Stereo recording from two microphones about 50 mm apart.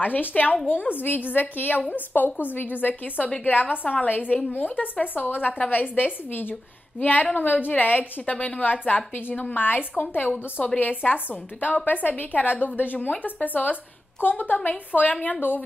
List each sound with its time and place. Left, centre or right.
0.0 s a woman's voice: left